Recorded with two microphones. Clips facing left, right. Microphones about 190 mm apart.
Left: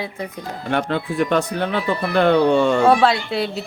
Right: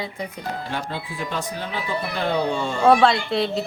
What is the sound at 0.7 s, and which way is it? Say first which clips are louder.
Speech: left 9 dB; 65° left (ahead or behind).